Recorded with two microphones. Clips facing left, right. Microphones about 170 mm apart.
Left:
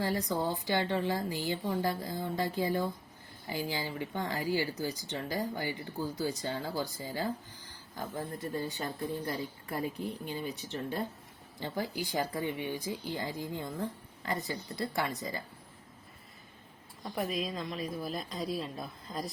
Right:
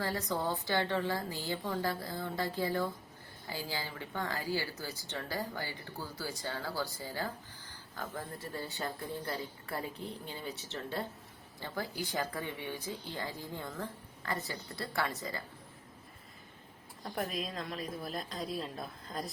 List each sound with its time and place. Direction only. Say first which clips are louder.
0.0 s speech: left 3 dB; 15° left (ahead or behind)
17.0 s a woman's voice: left 3 dB; centre (ahead or behind)